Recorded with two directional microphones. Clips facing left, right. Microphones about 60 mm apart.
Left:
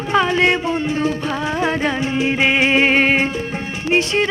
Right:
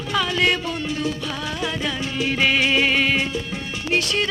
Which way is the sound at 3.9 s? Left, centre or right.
Left.